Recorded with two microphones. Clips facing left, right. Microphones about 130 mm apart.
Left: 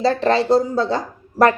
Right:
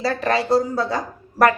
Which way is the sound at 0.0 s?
30° left (ahead or behind).